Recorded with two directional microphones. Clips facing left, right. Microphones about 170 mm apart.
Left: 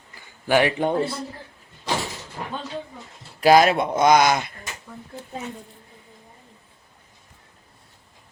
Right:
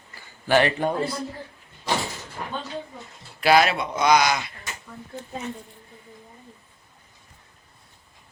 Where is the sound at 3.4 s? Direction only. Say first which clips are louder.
Left 4 dB; 40° left (ahead or behind).